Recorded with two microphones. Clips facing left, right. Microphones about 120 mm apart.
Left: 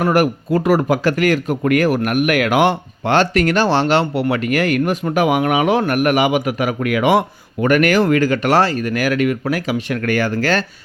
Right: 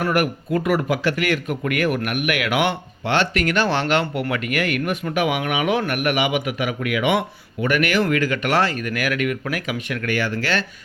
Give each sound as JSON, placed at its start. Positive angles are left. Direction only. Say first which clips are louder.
{"t": 0.0, "sound": "speech", "louder": "left 5 dB", "side_deg": 35}